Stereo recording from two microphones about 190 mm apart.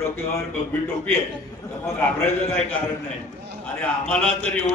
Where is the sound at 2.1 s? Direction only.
10° left (ahead or behind).